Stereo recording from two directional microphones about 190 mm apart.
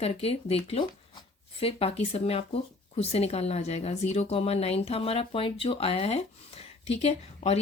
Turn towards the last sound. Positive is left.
turn(degrees=35)  # may be behind; listen again after turning